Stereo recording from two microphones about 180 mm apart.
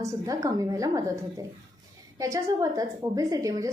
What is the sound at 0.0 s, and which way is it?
A woman's voice, 20° right (ahead or behind).